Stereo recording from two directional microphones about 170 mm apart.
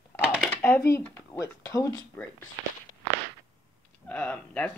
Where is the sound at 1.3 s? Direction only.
20° left (ahead or behind).